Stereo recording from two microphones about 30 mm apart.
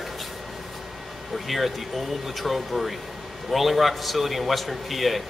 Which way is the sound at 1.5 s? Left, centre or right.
Centre.